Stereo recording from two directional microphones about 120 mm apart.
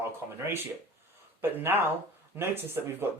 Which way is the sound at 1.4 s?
15° right (ahead or behind).